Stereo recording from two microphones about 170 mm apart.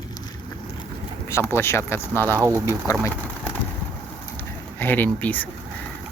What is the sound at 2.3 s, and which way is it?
Speech, 15° right (ahead or behind).